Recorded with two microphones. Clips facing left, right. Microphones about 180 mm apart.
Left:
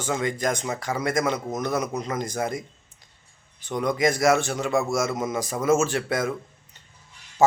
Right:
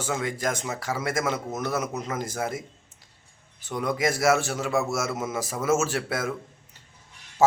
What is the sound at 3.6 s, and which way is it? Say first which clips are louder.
A man's voice: left 3 dB; 5° right (ahead or behind).